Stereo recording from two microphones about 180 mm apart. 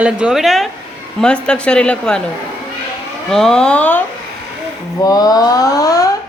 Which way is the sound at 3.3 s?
5° left (ahead or behind).